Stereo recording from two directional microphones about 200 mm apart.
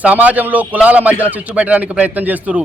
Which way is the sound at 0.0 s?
10° right (ahead or behind).